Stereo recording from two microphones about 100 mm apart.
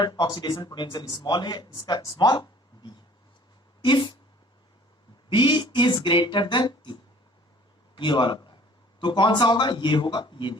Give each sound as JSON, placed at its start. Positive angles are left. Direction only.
{"t": 0.0, "sound": "speech", "side_deg": 45}
{"t": 2.0, "sound": "speech", "side_deg": 50}
{"t": 5.3, "sound": "a man's voice", "side_deg": 50}